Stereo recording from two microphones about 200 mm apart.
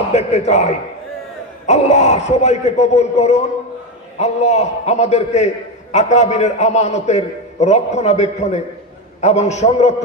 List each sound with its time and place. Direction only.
0.1 s a man's voice: 35° left (ahead or behind)
1.7 s a man's voice: 35° left (ahead or behind)